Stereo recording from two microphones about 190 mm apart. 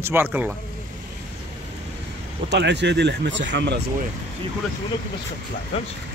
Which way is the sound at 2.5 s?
65° right (ahead or behind).